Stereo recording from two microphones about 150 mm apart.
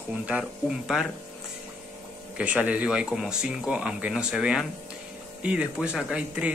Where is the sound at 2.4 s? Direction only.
10° right (ahead or behind).